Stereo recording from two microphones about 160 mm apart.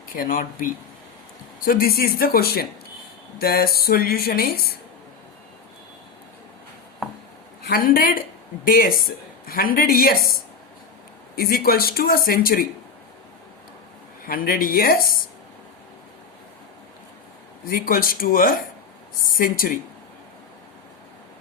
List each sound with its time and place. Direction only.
0.1 s speech: 60° left (ahead or behind)
7.7 s speech: 65° left (ahead or behind)
11.3 s speech: 65° left (ahead or behind)
14.3 s speech: 65° left (ahead or behind)
17.7 s speech: 65° left (ahead or behind)